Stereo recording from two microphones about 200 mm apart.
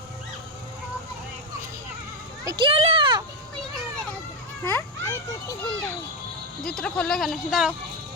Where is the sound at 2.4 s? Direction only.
20° right (ahead or behind).